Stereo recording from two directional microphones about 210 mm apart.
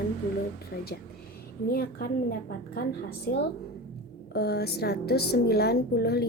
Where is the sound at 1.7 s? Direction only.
45° left (ahead or behind).